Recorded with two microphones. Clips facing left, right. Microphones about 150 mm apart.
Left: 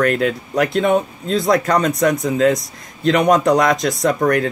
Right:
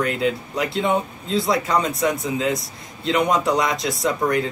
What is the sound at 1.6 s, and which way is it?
Speech, 90° left.